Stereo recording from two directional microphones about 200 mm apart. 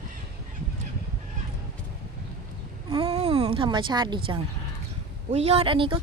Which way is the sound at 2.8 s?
25° right (ahead or behind).